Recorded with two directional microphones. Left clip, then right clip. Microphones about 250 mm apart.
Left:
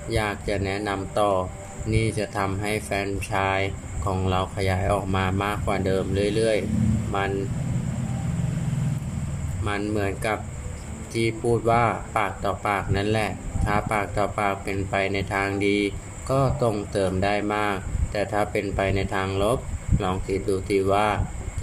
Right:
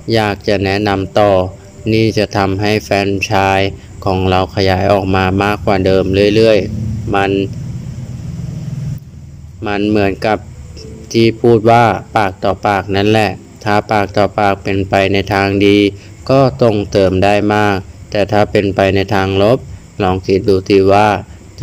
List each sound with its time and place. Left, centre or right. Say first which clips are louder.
0.1 s speech: right 13 dB; right
9.6 s speech: right 13 dB; right